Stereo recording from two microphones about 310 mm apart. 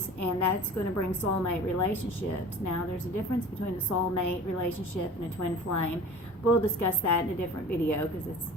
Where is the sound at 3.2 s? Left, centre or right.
Left.